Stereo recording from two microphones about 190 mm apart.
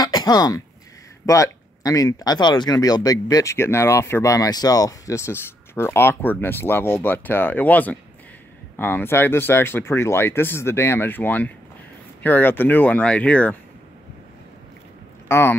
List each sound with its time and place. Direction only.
0.0 s throat clearing: 20° left (ahead or behind)
1.2 s speech: 15° left (ahead or behind)
15.2 s speech: 15° left (ahead or behind)